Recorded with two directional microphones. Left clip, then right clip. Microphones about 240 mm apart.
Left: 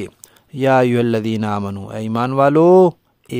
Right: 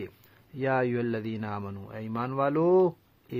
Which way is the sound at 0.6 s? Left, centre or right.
Left.